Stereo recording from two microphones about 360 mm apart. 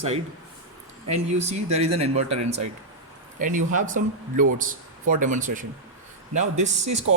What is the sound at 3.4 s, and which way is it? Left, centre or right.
Speech, right.